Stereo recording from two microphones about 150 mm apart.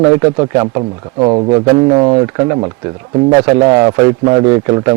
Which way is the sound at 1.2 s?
35° right (ahead or behind).